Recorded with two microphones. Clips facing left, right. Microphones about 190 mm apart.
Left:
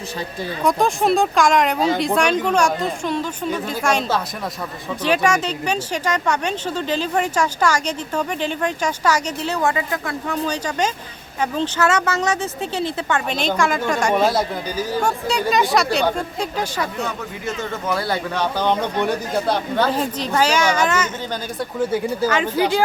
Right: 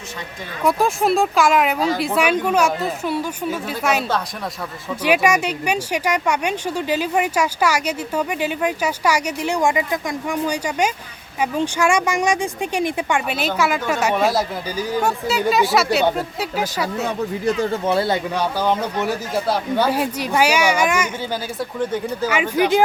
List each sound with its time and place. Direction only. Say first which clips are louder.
0.6 s a woman's voice: even; 5° right (ahead or behind)
17.1 s speech: right 6 dB; 35° right (ahead or behind)
18.3 s speech: left 3 dB; 5° right (ahead or behind)
21.6 s speech: left 3 dB; 5° left (ahead or behind)
22.3 s speech: right 4 dB; 10° right (ahead or behind)